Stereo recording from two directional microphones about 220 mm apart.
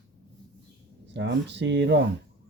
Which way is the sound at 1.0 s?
50° right (ahead or behind).